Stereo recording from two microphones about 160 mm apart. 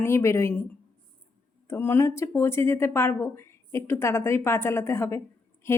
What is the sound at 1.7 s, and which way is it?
Speech, 15° left (ahead or behind).